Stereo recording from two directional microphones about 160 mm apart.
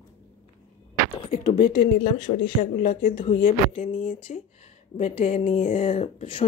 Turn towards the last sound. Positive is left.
turn(degrees=35)  # may be behind; listen again after turning